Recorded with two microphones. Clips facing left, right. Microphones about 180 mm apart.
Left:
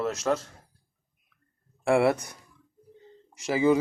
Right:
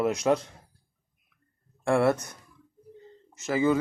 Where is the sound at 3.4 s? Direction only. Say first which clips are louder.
Left 2 dB; 15° left (ahead or behind).